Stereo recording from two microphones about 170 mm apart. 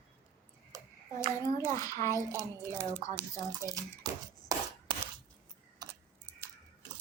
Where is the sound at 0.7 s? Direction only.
20° right (ahead or behind).